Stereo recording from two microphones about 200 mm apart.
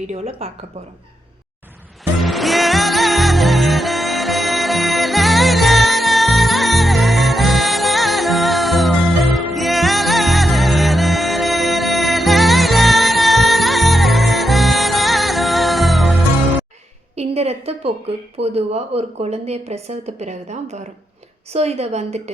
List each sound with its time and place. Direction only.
0.1 s a woman's voice: 30° right (ahead or behind)
2.1 s music: centre (ahead or behind)
17.2 s a woman's voice: 30° right (ahead or behind)